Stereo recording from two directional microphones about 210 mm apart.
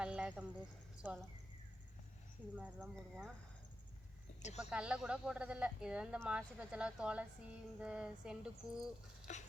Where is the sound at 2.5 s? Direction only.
5° right (ahead or behind).